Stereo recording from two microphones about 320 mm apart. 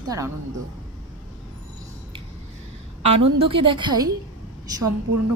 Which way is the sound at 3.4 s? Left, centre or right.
Centre.